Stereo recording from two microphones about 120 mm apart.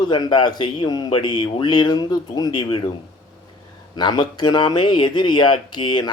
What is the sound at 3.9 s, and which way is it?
Speech, 40° left (ahead or behind).